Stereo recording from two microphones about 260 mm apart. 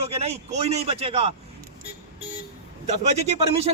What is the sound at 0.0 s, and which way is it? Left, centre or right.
Speech, right.